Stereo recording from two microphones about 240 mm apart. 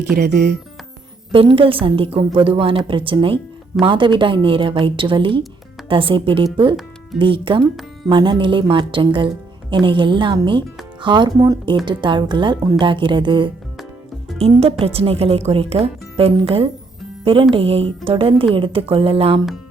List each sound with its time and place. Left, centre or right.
0.2 s speech: right
1.3 s a woman's voice: right